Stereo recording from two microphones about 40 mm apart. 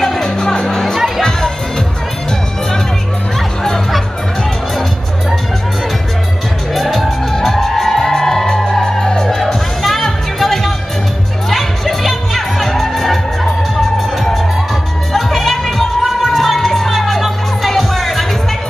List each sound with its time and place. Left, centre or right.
0.2 s music: centre
0.9 s music: centre
3.3 s music: centre
6.7 s music: centre